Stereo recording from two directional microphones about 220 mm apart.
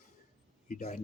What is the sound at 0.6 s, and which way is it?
Speech, 35° left (ahead or behind).